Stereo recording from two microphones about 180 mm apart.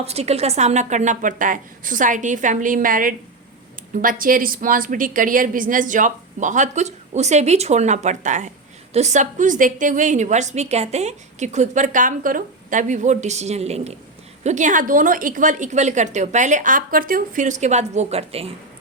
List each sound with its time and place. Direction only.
0.0 s a woman's voice: 35° right (ahead or behind)